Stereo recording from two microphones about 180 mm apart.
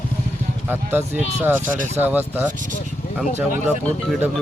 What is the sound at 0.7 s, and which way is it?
Speech, 10° right (ahead or behind).